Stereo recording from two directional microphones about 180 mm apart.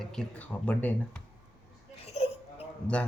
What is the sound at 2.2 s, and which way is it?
Crying, 35° left (ahead or behind).